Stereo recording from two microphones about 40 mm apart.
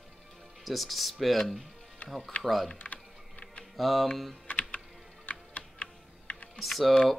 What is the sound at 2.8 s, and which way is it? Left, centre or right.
Typing, left.